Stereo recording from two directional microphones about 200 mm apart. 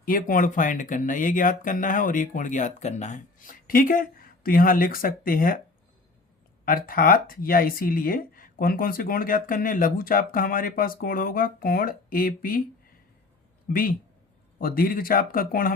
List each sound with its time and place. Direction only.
0.0 s speech: 45° left (ahead or behind)
6.7 s speech: 45° left (ahead or behind)
13.7 s speech: 50° left (ahead or behind)